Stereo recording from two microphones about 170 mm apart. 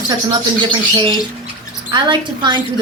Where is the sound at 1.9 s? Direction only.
30° right (ahead or behind).